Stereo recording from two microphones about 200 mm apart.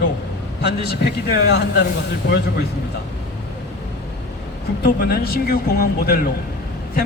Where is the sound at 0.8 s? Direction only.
55° left (ahead or behind).